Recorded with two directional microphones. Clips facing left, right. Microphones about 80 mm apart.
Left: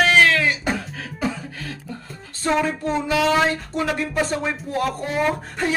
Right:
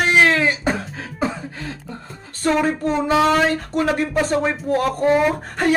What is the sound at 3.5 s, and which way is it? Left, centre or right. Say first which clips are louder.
Speech: right 4 dB; right.